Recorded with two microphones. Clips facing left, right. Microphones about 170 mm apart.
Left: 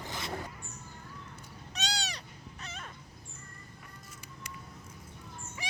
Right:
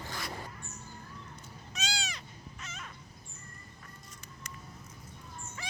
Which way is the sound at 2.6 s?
35° left (ahead or behind).